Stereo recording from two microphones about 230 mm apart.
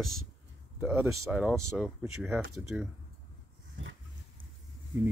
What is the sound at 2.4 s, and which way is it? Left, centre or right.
Speech, right.